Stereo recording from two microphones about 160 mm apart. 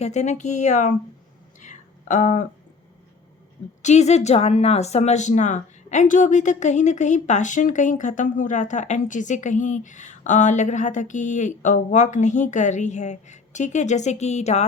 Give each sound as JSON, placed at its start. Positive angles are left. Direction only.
{"t": 0.0, "sound": "speech", "side_deg": 45}
{"t": 1.5, "sound": "a sound", "side_deg": 50}
{"t": 3.8, "sound": "speech", "side_deg": 45}